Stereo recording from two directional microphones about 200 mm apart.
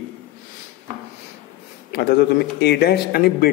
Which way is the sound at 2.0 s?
55° left (ahead or behind).